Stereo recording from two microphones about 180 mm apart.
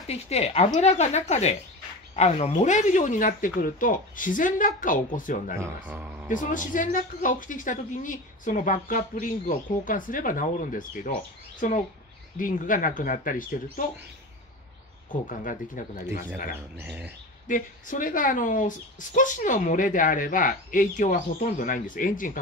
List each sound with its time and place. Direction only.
0.0 s speech: 35° left (ahead or behind)
5.6 s speech: 10° right (ahead or behind)
6.5 s speech: 45° left (ahead or behind)
12.4 s speech: 50° left (ahead or behind)
15.0 s speech: 45° left (ahead or behind)
17.5 s speech: 45° left (ahead or behind)